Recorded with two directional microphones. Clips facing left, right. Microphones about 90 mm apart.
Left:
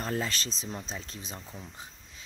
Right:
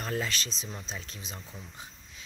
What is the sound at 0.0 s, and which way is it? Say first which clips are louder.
Speech: left 1 dB; 30° left (ahead or behind).